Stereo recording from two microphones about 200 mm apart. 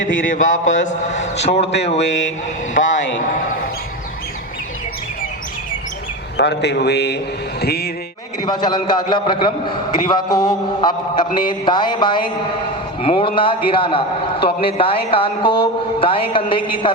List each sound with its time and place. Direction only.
0.0 s mantra: 70° left (ahead or behind)
0.3 s a man's voice: 40° left (ahead or behind)
0.5 s mantra: 70° left (ahead or behind)
1.4 s a man's voice: 30° left (ahead or behind)
2.0 s mantra: 65° left (ahead or behind)
6.3 s a man's voice: 55° left (ahead or behind)
8.4 s a man's voice: 20° left (ahead or behind)